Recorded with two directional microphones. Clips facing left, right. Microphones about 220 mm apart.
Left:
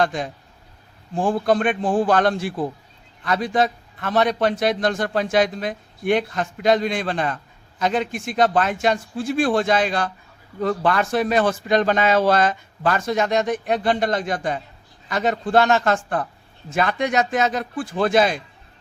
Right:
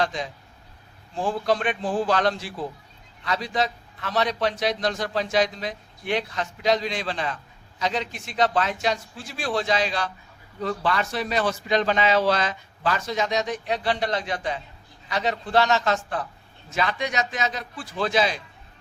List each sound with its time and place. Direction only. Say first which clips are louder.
0.0 s a man's voice: left 5 dB; 50° left (ahead or behind)